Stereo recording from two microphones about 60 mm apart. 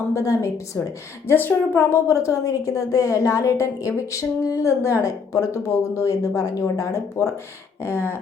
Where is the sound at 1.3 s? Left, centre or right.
Left.